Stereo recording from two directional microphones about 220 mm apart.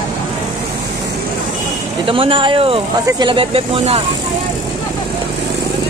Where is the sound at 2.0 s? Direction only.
25° right (ahead or behind).